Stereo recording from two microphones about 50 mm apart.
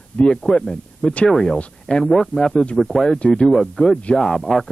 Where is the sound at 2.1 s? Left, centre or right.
Centre.